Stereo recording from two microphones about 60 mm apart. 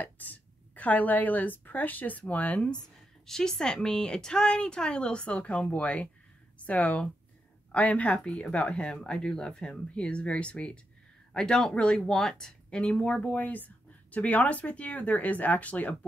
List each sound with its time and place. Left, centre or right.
0.0 s a woman's voice: left
3.3 s speech: centre; by 16.1 s left